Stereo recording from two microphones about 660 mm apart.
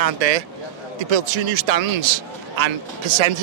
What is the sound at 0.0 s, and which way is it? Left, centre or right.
Speech, right.